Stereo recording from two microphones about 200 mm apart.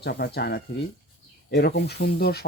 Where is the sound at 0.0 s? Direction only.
55° left (ahead or behind).